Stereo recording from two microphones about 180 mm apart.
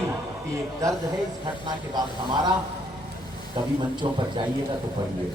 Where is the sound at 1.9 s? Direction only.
25° right (ahead or behind).